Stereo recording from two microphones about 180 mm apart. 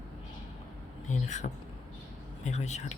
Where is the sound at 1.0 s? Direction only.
40° left (ahead or behind).